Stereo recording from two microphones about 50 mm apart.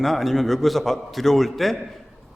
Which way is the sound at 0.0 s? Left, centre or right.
Centre.